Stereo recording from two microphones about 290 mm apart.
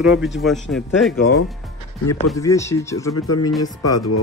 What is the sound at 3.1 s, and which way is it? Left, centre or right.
Speech, left.